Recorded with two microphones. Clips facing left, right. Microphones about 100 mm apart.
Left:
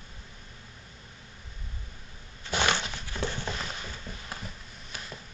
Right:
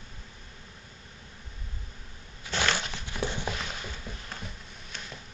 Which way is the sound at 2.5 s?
15° left (ahead or behind).